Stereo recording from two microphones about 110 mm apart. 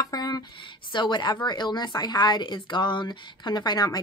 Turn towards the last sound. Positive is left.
turn(degrees=40)  # may be behind; listen again after turning